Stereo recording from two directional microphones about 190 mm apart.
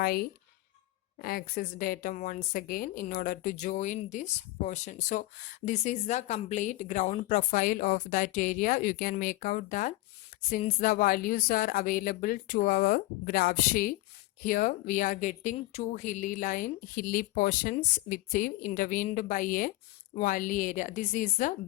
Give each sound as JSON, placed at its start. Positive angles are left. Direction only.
{"t": 0.0, "sound": "a woman's voice", "side_deg": 50}